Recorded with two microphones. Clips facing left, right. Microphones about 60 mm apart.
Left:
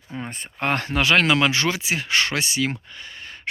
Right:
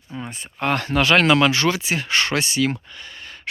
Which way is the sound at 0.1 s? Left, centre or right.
Left.